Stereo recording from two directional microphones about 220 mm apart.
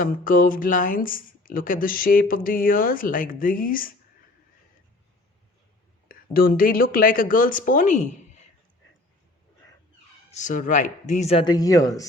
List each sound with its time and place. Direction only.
0.0 s speech: 40° left (ahead or behind)
6.3 s speech: 40° left (ahead or behind)
10.3 s speech: 35° left (ahead or behind); by 12.0 s 15° left (ahead or behind)